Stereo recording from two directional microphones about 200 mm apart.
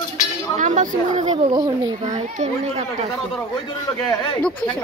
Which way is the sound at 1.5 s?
20° right (ahead or behind).